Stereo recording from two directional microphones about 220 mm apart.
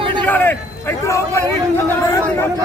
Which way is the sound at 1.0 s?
15° left (ahead or behind).